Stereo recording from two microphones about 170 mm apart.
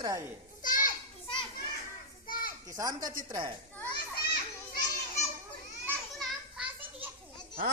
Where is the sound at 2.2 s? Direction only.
55° left (ahead or behind).